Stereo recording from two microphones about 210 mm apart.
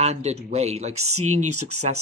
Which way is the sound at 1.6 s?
35° right (ahead or behind).